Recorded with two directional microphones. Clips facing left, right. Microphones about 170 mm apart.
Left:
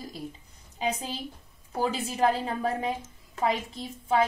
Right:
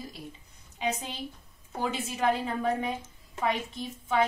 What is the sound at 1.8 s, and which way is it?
A woman's voice, 35° left (ahead or behind).